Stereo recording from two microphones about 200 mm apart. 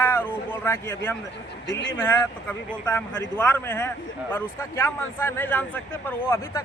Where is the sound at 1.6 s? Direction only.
65° left (ahead or behind).